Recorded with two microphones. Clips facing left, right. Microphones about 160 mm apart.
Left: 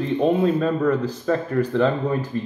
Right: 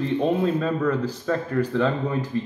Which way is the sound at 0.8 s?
15° left (ahead or behind).